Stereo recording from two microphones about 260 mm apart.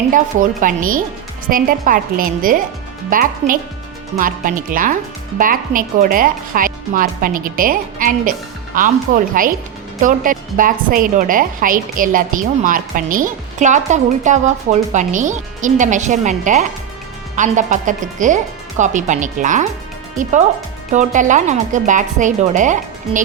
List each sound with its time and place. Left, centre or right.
0.1 s speech: right
20.9 s speech: right